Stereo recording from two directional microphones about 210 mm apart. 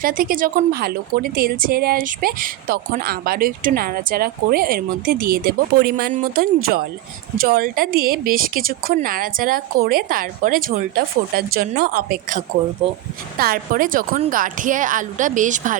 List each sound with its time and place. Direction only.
0.0 s a woman's voice: 45° right (ahead or behind)
13.4 s a woman's voice: 40° right (ahead or behind)